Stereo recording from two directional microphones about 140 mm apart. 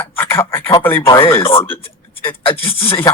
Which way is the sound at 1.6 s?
15° left (ahead or behind).